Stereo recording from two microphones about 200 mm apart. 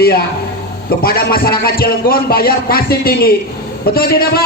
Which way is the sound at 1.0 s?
50° left (ahead or behind).